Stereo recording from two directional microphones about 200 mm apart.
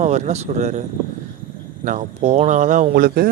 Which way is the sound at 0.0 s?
35° right (ahead or behind).